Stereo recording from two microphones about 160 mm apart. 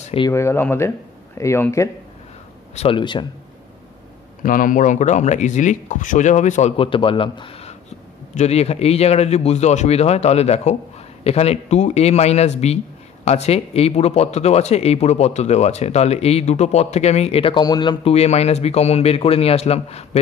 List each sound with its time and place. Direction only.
0.0 s a sound: 35° left (ahead or behind)
0.3 s speech: 15° left (ahead or behind)
2.7 s speech: 35° left (ahead or behind)
4.4 s speech: 60° left (ahead or behind)
6.8 s speech: 35° left (ahead or behind)
18.1 s speech: 40° left (ahead or behind)